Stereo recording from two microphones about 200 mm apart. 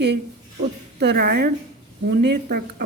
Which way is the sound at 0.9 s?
55° right (ahead or behind).